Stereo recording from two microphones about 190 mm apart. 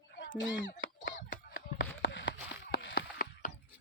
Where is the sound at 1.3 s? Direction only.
60° left (ahead or behind).